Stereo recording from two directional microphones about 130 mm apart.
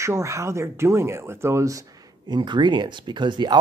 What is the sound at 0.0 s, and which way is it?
Speech, 20° right (ahead or behind).